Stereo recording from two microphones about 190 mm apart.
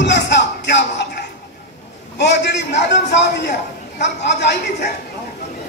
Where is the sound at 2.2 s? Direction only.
65° left (ahead or behind).